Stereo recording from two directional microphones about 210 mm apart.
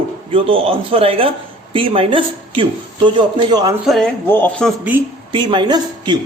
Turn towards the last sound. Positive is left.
turn(degrees=-20)  # may be behind; listen again after turning